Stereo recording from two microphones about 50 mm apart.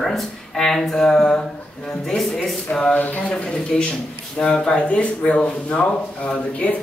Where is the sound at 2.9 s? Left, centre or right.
Left.